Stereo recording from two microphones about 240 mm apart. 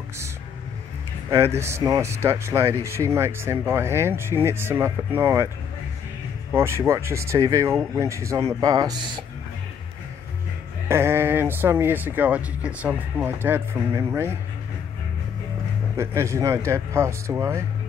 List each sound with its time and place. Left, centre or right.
1.3 s speech: centre
6.5 s speech: centre
10.9 s speech: centre
16.0 s speech: centre